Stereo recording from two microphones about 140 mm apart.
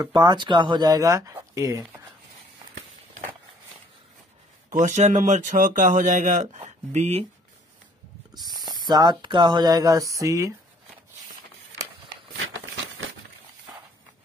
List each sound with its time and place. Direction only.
0.0 s speech: 30° right (ahead or behind)
4.7 s speech: 60° right (ahead or behind)
8.4 s speech: 30° right (ahead or behind)